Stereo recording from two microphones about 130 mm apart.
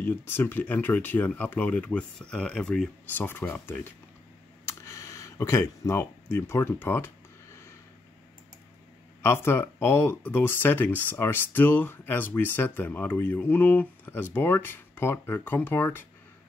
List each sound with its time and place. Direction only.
0.0 s speech: 15° left (ahead or behind)
4.6 s camera: 20° left (ahead or behind)
6.3 s speech: 20° left (ahead or behind)
9.2 s speech: 20° left (ahead or behind)